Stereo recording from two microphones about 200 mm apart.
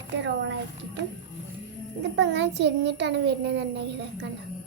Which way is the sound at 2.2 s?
65° right (ahead or behind).